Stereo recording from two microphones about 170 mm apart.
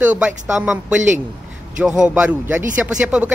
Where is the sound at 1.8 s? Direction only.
5° right (ahead or behind).